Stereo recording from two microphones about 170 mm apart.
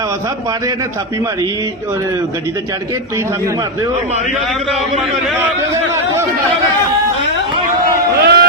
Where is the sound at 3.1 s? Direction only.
20° right (ahead or behind).